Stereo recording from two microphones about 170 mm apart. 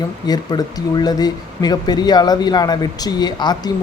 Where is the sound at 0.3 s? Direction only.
25° left (ahead or behind).